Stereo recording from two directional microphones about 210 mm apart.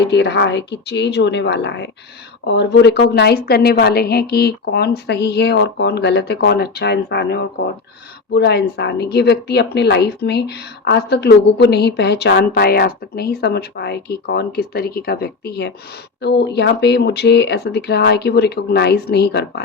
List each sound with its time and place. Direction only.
0.0 s a woman's voice: 55° left (ahead or behind)